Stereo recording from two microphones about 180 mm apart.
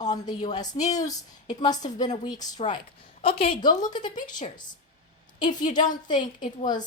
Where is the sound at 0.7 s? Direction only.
40° left (ahead or behind).